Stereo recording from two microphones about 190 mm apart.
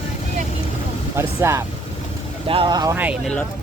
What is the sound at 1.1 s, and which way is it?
Speech, 15° right (ahead or behind).